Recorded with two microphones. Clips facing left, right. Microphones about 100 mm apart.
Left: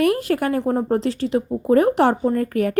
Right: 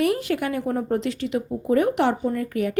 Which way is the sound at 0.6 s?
30° left (ahead or behind).